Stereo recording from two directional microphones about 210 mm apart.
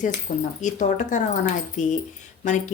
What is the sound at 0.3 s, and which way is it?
Speech, 30° left (ahead or behind).